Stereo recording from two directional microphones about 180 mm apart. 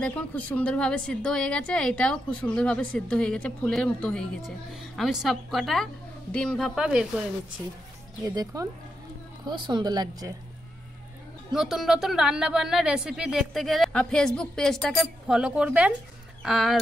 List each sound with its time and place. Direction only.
0.0 s a woman's voice: 10° left (ahead or behind)
8.3 s speech: 20° right (ahead or behind)
11.5 s a woman's voice: centre (ahead or behind)